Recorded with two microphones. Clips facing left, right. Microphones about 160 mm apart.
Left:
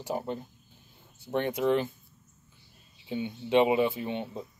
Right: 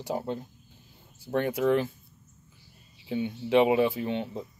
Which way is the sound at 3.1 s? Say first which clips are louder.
Right 3 dB; 5° right (ahead or behind).